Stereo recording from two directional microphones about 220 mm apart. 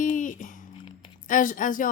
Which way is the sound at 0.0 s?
35° left (ahead or behind).